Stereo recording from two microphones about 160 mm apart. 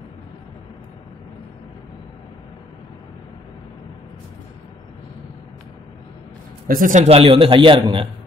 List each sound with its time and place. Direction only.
6.7 s a man's voice: 55° right (ahead or behind); by 8.1 s 35° right (ahead or behind)